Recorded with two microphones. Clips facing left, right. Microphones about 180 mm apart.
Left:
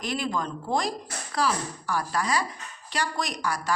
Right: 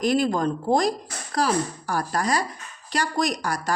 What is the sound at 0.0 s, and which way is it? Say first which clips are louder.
A woman's voice: right 8 dB; 40° right (ahead or behind).